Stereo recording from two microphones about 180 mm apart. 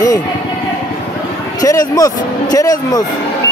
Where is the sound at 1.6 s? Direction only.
20° left (ahead or behind).